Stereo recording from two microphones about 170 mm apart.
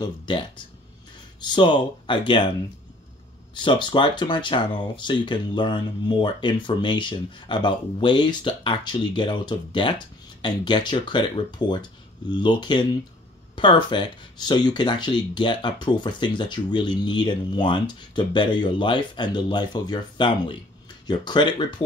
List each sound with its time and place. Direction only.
0.0 s speech: 25° left (ahead or behind)
3.6 s speech: 30° left (ahead or behind)